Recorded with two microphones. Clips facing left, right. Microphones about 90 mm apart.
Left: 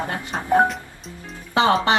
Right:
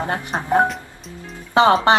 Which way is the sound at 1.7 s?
30° right (ahead or behind).